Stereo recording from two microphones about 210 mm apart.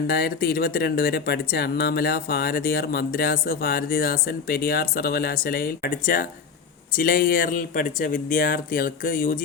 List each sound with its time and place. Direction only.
0.1 s speech: 45° left (ahead or behind)